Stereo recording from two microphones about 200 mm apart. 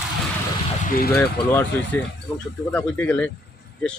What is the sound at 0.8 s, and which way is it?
Speech, 45° left (ahead or behind).